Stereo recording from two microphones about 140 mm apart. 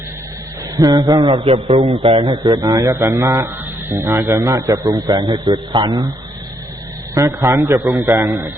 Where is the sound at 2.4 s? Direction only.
25° right (ahead or behind).